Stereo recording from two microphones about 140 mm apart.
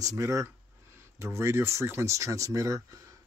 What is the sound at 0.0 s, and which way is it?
Speech, 20° right (ahead or behind).